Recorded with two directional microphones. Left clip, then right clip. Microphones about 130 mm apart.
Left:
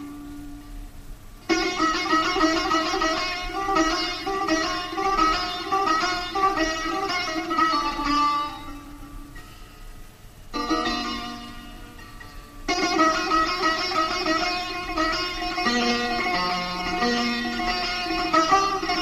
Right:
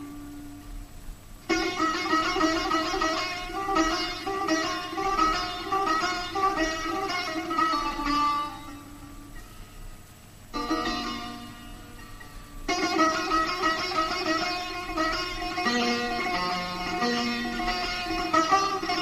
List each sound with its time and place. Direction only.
1.5 s music: 30° left (ahead or behind)
10.5 s music: 40° left (ahead or behind)
12.6 s music: 40° left (ahead or behind)